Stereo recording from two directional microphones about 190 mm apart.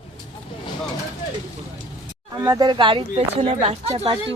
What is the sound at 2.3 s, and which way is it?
Speech, 20° right (ahead or behind).